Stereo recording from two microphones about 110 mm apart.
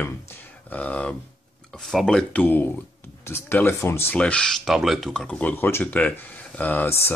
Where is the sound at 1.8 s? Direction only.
Centre (ahead or behind).